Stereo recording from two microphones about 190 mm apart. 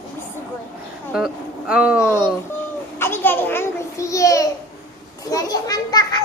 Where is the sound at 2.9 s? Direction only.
10° left (ahead or behind).